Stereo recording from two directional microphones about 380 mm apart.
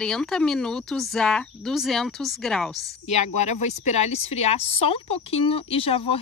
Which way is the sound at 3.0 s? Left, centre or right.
Centre.